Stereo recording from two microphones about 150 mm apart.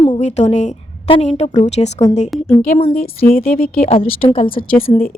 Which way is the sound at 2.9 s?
75° left (ahead or behind).